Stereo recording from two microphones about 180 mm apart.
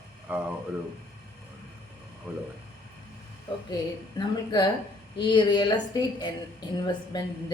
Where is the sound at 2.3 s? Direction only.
10° right (ahead or behind).